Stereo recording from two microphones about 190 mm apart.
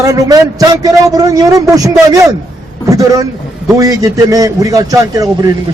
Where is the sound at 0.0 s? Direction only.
20° right (ahead or behind).